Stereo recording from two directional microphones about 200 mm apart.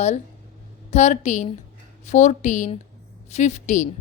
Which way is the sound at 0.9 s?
35° left (ahead or behind).